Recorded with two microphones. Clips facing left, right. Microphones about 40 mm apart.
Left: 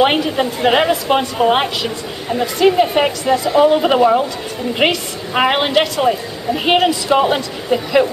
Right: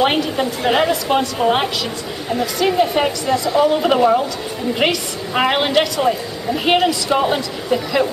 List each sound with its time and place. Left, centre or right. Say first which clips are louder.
0.0 s a woman's voice: left 2 dB; centre